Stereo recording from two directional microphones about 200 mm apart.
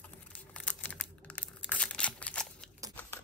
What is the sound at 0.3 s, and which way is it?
Crumpling, 5° left (ahead or behind).